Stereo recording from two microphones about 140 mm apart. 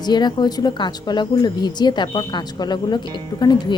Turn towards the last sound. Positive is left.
turn(degrees=30)  # may be behind; listen again after turning